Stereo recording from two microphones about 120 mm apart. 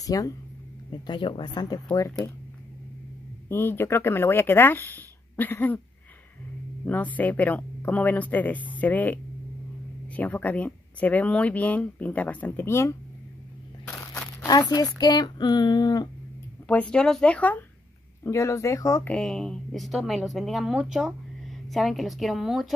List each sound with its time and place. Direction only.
0.0 s speech: 30° left (ahead or behind)
1.0 s speech: 45° left (ahead or behind)
2.0 s speech: 25° left (ahead or behind)
3.4 s speech: 20° left (ahead or behind)
6.9 s speech: 15° left (ahead or behind)
14.4 s speech: 35° left (ahead or behind)
16.6 s speech: 10° left (ahead or behind)
18.2 s speech: 25° left (ahead or behind)
19.0 s a woman's voice: 5° left (ahead or behind)